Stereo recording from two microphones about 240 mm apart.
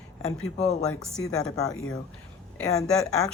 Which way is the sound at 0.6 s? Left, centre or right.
Left.